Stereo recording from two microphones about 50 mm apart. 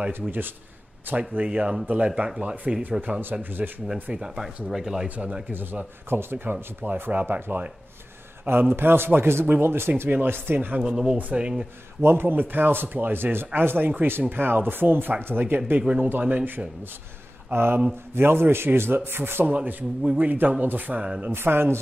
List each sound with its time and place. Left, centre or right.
0.1 s speech: right
1.3 s speech: right
2.4 s speech: right
3.8 s speech: centre
5.0 s speech: right
5.5 s speech: right
10.0 s speech: right
10.8 s speech: centre
12.0 s speech: right
17.5 s a sound: right
18.1 s speech: right
19.4 s speech: right
21.3 s speech: right